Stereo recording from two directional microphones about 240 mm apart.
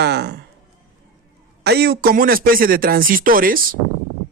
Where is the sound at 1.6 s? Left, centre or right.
Right.